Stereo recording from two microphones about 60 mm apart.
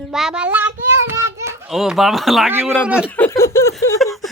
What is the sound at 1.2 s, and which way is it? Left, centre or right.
Children playing, right.